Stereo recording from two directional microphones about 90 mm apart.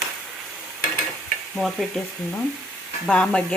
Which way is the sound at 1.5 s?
Centre (ahead or behind).